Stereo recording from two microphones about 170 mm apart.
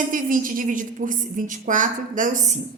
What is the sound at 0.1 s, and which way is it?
A woman's voice, 55° right (ahead or behind).